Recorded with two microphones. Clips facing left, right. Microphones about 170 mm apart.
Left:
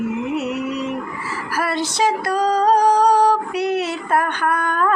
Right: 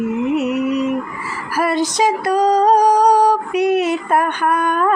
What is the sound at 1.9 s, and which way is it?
Music, 15° right (ahead or behind).